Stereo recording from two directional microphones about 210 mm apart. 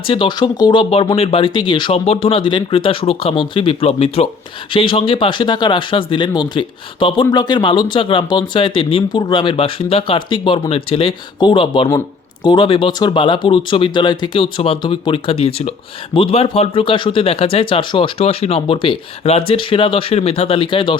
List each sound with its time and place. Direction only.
0.1 s speech: 20° left (ahead or behind)